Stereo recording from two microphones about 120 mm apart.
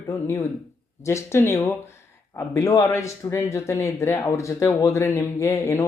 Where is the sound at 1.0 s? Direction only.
20° left (ahead or behind).